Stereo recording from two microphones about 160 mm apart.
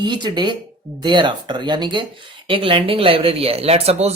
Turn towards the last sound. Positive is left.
turn(degrees=-40)  # may be behind; listen again after turning